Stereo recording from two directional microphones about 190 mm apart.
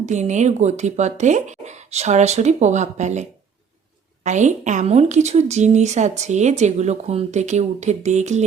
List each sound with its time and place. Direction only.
0.0 s a woman's voice: 40° right (ahead or behind)